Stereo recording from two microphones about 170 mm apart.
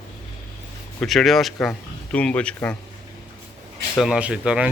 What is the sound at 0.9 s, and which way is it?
Speech, centre (ahead or behind).